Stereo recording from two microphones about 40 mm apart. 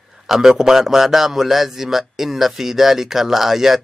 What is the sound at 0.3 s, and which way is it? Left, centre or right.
A man's voice, centre.